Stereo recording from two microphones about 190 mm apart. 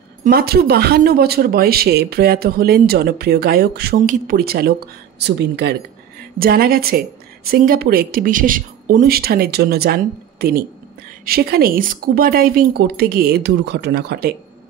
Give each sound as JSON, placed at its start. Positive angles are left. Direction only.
{"t": 0.2, "sound": "a woman's voice", "side_deg": -55}